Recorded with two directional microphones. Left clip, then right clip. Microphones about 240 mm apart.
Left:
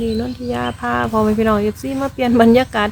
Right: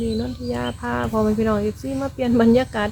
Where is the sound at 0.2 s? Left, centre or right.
Centre.